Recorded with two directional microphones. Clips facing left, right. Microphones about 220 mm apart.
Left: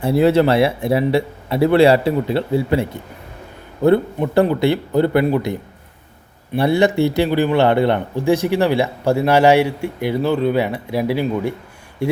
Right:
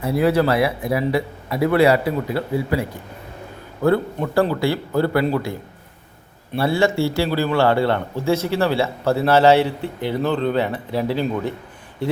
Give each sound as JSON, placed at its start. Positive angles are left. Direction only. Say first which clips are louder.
{"t": 0.0, "sound": "a man's voice", "louder": "left 4 dB", "side_deg": 30}
{"t": 3.8, "sound": "a man's voice", "louder": "left 4 dB", "side_deg": 20}